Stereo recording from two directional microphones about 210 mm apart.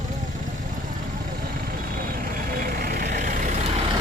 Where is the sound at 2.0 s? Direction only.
45° right (ahead or behind).